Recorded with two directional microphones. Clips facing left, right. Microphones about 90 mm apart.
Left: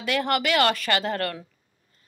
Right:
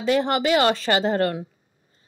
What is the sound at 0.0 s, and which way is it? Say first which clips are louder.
Speech: right 4 dB; 25° right (ahead or behind).